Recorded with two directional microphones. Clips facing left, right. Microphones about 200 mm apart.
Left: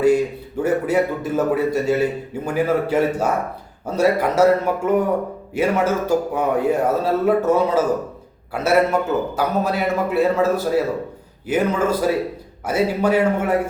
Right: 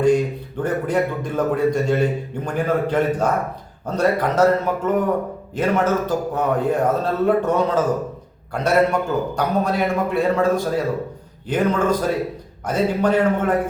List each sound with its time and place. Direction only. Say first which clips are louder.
0.0 s a man's voice: left 1 dB; 5° left (ahead or behind)